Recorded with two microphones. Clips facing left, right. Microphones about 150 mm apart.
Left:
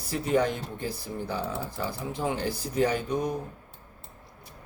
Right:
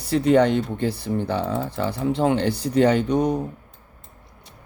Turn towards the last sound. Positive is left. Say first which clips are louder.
# right 9 dB
turn(degrees=-70)  # may be behind; listen again after turning